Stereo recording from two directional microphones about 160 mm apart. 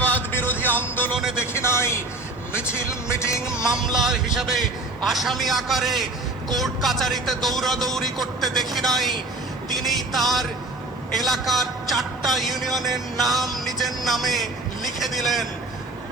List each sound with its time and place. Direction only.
0.0 s a sound: 10° left (ahead or behind)
1.1 s a man's voice: 5° right (ahead or behind)
1.5 s a man's voice: 15° left (ahead or behind)
3.9 s a man's voice: 5° right (ahead or behind)